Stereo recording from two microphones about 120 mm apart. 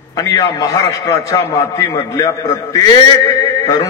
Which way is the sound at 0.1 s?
30° left (ahead or behind).